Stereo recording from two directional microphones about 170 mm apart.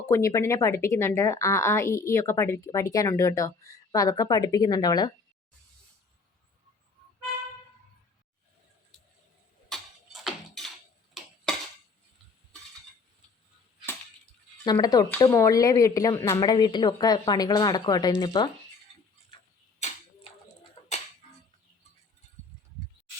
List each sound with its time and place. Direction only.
0.0 s a woman's voice: 15° left (ahead or behind)
9.6 s music: centre (ahead or behind)
14.6 s a woman's voice: 25° left (ahead or behind)